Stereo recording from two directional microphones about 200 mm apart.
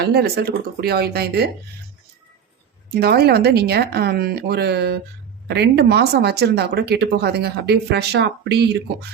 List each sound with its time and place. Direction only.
0.0 s speech: 55° right (ahead or behind)
2.9 s speech: 50° right (ahead or behind)